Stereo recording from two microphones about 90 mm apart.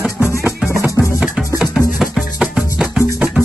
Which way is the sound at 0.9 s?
10° right (ahead or behind).